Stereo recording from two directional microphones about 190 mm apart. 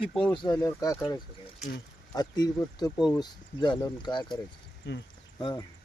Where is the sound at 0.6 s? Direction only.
20° left (ahead or behind).